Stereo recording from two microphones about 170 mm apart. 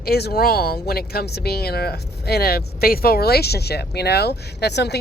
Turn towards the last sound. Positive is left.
turn(degrees=80)